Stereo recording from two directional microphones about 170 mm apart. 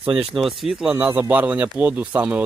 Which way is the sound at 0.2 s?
Centre (ahead or behind).